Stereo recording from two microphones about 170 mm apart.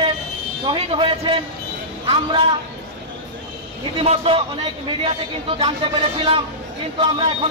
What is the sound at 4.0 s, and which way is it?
A man's voice, 35° right (ahead or behind).